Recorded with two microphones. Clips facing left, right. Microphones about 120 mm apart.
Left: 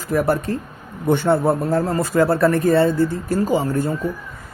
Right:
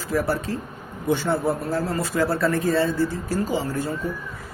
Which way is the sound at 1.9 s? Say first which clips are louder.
Left 6 dB; 50° left (ahead or behind).